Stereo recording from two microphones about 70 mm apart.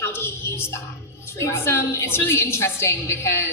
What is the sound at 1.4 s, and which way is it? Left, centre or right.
A woman's voice, left.